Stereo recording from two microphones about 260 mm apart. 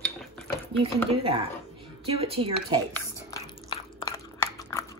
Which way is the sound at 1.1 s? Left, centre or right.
Right.